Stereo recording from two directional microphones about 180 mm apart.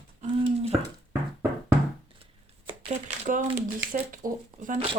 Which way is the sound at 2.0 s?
30° right (ahead or behind).